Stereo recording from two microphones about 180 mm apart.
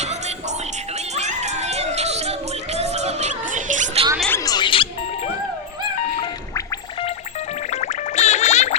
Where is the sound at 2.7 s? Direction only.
35° right (ahead or behind).